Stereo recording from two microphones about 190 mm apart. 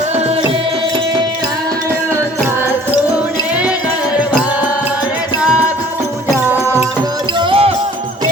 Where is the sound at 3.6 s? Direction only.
5° right (ahead or behind).